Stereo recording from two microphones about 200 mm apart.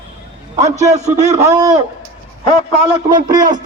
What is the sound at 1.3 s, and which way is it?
Speech, 20° right (ahead or behind).